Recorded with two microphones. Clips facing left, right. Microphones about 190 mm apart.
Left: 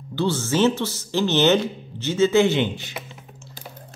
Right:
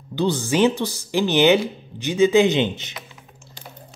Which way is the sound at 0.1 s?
15° right (ahead or behind).